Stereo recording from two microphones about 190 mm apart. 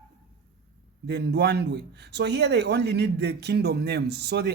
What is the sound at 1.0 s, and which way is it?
A man's voice, 60° right (ahead or behind).